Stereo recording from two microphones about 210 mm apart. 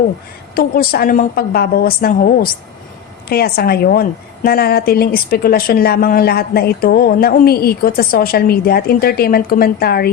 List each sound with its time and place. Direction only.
0.5 s a woman's voice: 45° left (ahead or behind)